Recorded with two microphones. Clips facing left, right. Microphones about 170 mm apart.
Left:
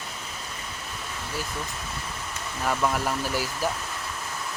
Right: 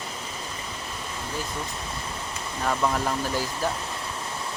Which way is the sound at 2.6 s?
5° left (ahead or behind).